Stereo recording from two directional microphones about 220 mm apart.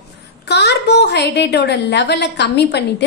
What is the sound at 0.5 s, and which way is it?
A woman's voice, 50° left (ahead or behind).